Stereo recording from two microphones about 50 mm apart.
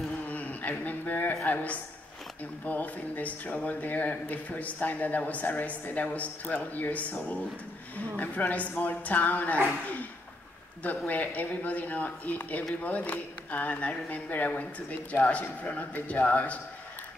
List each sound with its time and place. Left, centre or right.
0.3 s a sound: left
1.4 s a man's voice: left
10.8 s a man's voice: left